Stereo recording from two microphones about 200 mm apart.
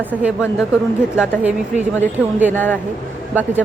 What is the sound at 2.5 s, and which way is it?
Speech, 10° left (ahead or behind).